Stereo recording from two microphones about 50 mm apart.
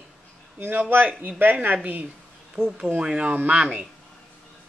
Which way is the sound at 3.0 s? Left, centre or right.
Centre.